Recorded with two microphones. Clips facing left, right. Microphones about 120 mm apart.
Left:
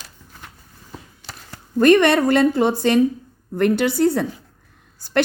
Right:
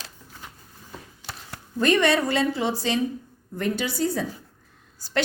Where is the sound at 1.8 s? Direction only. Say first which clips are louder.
Left 7 dB; 60° left (ahead or behind).